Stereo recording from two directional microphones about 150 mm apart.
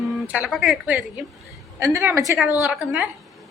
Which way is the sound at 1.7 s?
20° right (ahead or behind).